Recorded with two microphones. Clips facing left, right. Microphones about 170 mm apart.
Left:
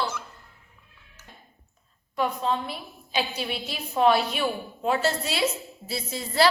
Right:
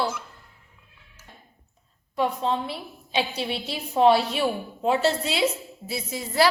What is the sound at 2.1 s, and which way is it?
A woman's voice, 30° right (ahead or behind).